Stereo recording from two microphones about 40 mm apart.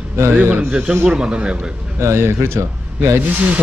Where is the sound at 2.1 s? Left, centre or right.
Right.